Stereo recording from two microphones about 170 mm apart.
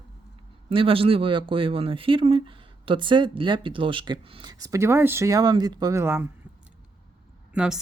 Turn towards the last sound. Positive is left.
turn(degrees=-5)  # may be behind; listen again after turning